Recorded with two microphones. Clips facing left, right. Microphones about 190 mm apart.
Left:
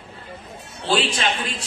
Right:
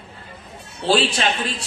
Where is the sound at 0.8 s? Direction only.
30° right (ahead or behind).